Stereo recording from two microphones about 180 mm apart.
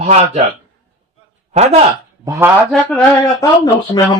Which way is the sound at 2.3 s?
10° right (ahead or behind).